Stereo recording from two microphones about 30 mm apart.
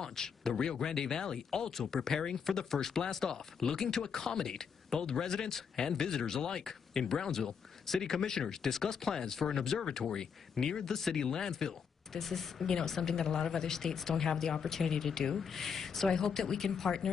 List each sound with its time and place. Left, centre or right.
0.0 s speech: centre
3.2 s speech: left
3.6 s speech: centre
12.2 s speech: centre